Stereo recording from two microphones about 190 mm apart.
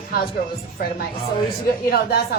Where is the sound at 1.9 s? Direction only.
55° left (ahead or behind).